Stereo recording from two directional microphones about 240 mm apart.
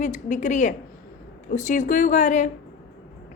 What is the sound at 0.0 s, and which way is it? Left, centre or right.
A woman's voice, left.